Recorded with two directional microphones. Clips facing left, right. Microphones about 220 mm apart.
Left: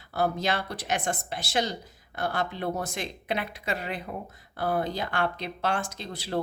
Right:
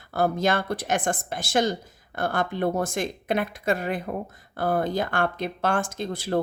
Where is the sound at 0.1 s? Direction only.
50° right (ahead or behind).